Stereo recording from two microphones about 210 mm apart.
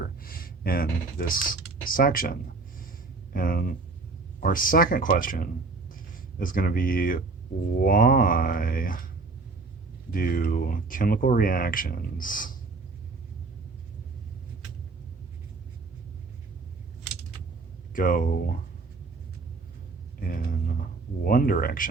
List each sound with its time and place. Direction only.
0.0 s a sound: 45° left (ahead or behind)
1.3 s speech: 40° left (ahead or behind)
10.1 s speech: 40° left (ahead or behind)
17.9 s speech: 40° left (ahead or behind)
20.2 s speech: 40° left (ahead or behind)